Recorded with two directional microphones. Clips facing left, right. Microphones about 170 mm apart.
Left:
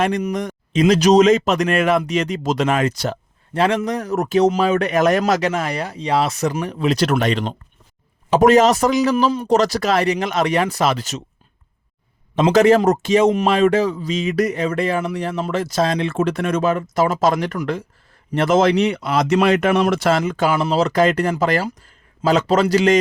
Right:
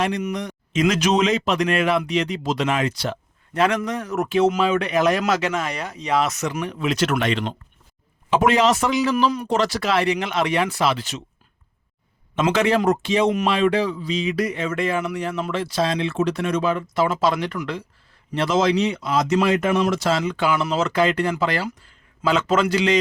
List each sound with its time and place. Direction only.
0.2 s speech: 45° left (ahead or behind)
3.5 s a man's voice: 30° left (ahead or behind)
9.1 s speech: 30° left (ahead or behind)
9.5 s a man's voice: 40° left (ahead or behind)
12.4 s speech: 40° left (ahead or behind)